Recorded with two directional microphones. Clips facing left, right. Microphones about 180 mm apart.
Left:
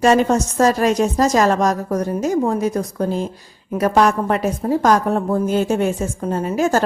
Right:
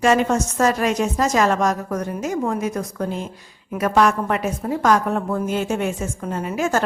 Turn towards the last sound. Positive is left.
turn(degrees=35)  # may be behind; listen again after turning